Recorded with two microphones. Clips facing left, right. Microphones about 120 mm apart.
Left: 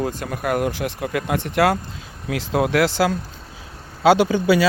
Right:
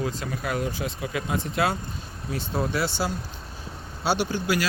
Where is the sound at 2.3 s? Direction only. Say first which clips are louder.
Left 8 dB; 85° left.